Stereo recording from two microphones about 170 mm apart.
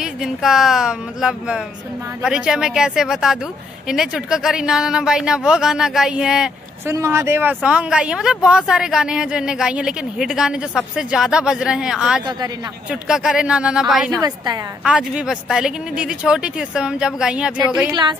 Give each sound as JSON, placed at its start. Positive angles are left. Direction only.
{"t": 0.0, "sound": "speech", "side_deg": -5}
{"t": 6.9, "sound": "speech", "side_deg": -15}
{"t": 14.2, "sound": "a woman's voice", "side_deg": -25}
{"t": 14.8, "sound": "speech", "side_deg": -5}